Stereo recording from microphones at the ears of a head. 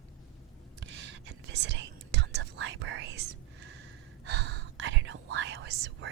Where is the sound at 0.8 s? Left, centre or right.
Right.